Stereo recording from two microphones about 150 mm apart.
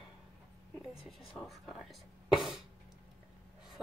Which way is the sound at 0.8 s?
Centre (ahead or behind).